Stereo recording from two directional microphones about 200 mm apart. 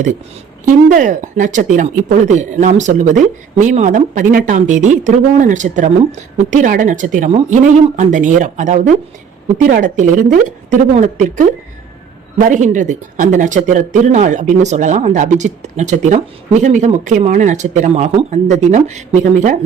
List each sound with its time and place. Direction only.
0.9 s speech: 40° right (ahead or behind)